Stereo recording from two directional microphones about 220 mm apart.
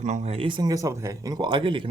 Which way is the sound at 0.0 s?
30° right (ahead or behind).